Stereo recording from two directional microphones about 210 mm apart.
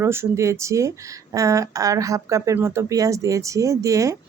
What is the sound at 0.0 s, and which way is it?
Speech, 10° right (ahead or behind).